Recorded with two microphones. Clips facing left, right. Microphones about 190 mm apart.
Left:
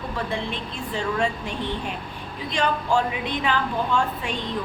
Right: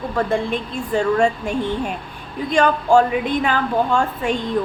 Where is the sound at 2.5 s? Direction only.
50° right (ahead or behind).